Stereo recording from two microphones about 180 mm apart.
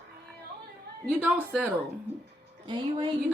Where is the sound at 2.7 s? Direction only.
25° right (ahead or behind).